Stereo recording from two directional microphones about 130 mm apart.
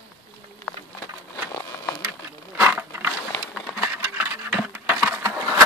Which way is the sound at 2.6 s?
15° right (ahead or behind).